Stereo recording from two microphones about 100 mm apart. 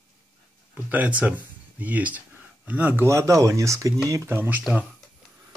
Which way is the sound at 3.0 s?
30° right (ahead or behind).